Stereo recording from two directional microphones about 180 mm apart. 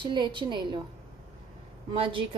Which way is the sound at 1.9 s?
30° right (ahead or behind).